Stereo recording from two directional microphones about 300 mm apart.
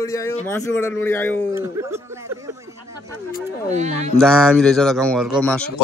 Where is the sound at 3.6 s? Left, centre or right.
Right.